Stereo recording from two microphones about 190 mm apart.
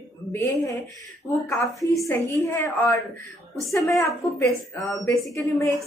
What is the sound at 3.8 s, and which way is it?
Speech, centre (ahead or behind).